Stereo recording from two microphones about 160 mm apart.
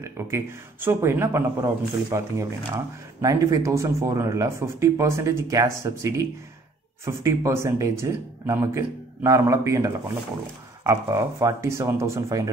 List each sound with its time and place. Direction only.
0.0 s speech: 15° right (ahead or behind)